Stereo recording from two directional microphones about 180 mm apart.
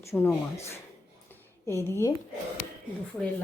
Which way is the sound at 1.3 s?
15° left (ahead or behind).